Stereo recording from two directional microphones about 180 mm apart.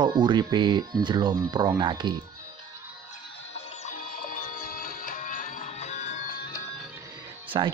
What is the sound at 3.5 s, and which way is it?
Music, 45° left (ahead or behind).